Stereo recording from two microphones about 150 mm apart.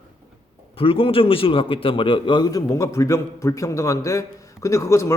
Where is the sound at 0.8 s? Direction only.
35° left (ahead or behind).